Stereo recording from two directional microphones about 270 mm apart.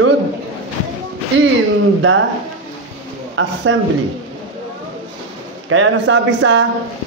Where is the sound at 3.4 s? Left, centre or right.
Right.